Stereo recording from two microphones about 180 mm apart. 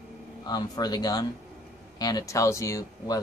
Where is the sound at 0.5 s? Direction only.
20° left (ahead or behind).